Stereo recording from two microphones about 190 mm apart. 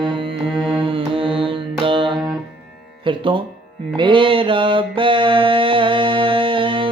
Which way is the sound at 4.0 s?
25° right (ahead or behind).